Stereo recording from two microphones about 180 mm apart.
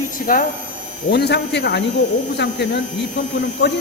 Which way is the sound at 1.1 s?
70° left (ahead or behind).